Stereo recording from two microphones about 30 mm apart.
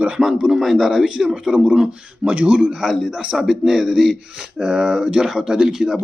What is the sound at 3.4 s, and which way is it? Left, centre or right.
Speech, right.